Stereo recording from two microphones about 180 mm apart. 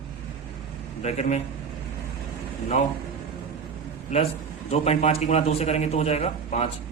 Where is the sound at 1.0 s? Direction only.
40° left (ahead or behind).